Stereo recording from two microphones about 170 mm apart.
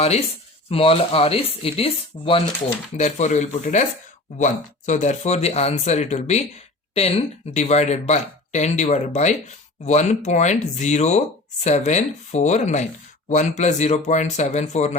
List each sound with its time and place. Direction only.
0.7 s speech: 35° left (ahead or behind)
3.0 s speech: 45° left (ahead or behind)